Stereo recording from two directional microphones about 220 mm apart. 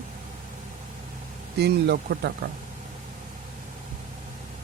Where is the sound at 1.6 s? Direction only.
50° right (ahead or behind).